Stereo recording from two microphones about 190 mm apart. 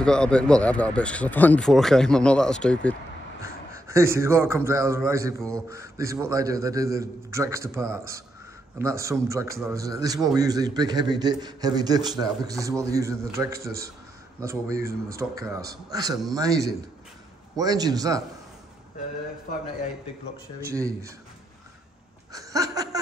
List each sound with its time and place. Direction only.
0.0 s speech: 5° left (ahead or behind)
3.4 s a man's voice: 15° right (ahead or behind)
20.6 s a man's voice: 15° right (ahead or behind)
22.3 s laughter: 20° right (ahead or behind)